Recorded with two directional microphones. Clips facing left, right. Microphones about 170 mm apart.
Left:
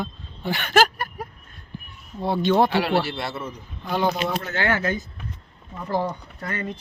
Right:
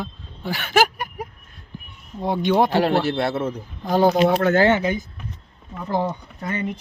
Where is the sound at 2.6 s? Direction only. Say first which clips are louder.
Right 3 dB; 45° right (ahead or behind).